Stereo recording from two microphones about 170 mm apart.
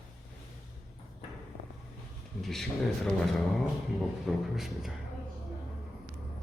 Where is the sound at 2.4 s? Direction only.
Centre (ahead or behind).